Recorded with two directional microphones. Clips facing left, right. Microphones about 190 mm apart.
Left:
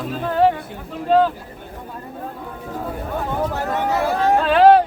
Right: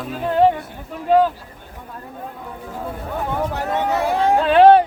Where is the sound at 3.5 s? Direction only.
20° right (ahead or behind).